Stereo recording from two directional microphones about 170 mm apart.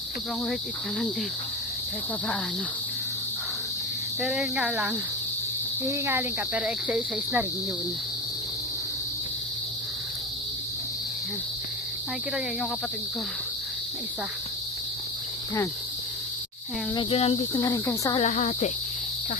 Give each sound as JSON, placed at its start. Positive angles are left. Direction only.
{"t": 4.2, "sound": "speech", "side_deg": 0}
{"t": 5.9, "sound": "cricket", "side_deg": -10}
{"t": 16.9, "sound": "speech", "side_deg": 30}
{"t": 18.2, "sound": "speech", "side_deg": 40}